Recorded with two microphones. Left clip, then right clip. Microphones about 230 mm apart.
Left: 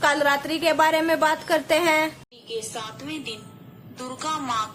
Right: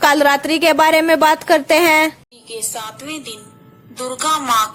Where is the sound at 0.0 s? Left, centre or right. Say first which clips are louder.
Right 8 dB; right.